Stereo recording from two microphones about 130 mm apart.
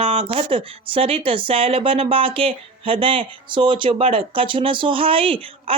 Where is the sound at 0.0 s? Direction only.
45° right (ahead or behind).